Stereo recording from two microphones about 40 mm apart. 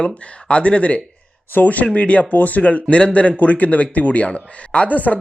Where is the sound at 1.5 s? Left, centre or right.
Left.